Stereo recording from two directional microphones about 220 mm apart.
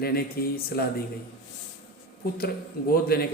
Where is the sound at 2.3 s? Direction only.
45° left (ahead or behind).